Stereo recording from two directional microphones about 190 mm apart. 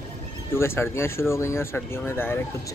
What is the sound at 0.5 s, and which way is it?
Speech, 15° left (ahead or behind).